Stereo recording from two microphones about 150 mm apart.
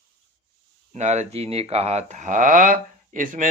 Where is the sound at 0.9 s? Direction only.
50° right (ahead or behind).